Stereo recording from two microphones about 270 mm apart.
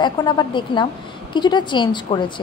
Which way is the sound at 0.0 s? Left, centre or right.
Centre.